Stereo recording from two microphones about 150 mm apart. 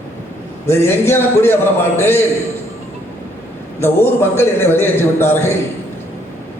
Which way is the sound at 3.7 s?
15° left (ahead or behind).